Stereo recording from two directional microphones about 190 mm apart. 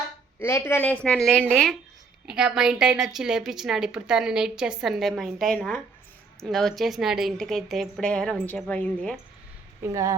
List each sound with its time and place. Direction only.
0.3 s a woman's voice: 15° left (ahead or behind)
9.8 s speech: 15° right (ahead or behind)